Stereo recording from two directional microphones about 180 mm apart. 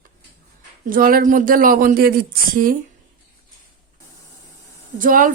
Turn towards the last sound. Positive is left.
turn(degrees=-50)  # may be behind; listen again after turning